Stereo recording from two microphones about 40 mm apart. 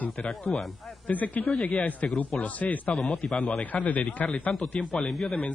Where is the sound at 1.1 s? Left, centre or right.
Left.